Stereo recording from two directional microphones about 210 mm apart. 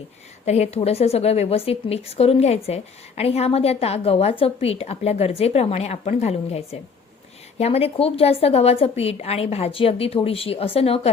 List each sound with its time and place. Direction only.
0.4 s a woman's voice: 30° left (ahead or behind)